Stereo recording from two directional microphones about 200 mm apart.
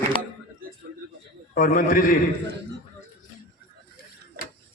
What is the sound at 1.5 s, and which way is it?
Speech, 45° left (ahead or behind).